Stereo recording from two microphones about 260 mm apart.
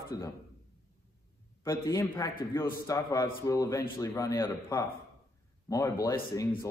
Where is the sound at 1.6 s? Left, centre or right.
Centre.